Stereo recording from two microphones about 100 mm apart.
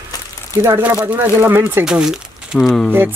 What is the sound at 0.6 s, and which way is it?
Speech, 20° right (ahead or behind).